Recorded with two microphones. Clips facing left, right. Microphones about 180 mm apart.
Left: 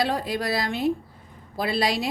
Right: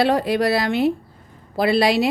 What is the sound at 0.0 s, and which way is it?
A woman's voice, 70° right (ahead or behind).